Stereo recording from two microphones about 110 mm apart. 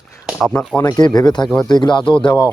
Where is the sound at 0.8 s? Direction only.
35° left (ahead or behind).